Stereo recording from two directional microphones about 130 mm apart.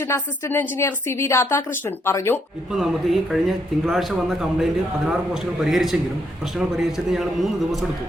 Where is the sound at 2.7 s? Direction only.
Centre (ahead or behind).